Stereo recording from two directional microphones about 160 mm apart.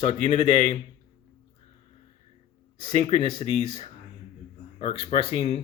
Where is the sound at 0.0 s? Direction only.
40° left (ahead or behind).